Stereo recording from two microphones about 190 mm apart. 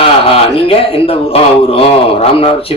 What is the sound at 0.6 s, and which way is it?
A man's voice, 30° left (ahead or behind).